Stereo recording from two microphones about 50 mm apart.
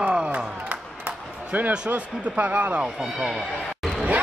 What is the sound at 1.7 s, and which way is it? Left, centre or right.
Speech, right.